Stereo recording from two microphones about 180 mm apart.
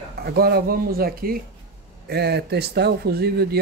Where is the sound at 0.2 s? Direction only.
60° right (ahead or behind).